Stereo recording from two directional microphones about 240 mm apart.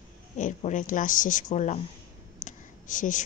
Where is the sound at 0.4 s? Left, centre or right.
Left.